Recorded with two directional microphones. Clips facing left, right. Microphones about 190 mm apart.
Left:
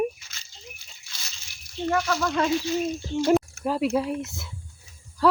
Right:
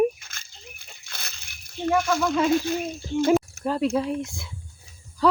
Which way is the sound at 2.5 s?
50° right (ahead or behind).